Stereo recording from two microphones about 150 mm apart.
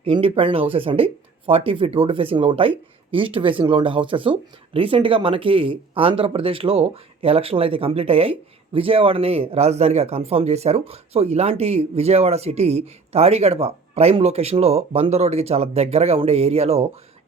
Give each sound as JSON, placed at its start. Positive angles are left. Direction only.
{"t": 0.0, "sound": "speech", "side_deg": -40}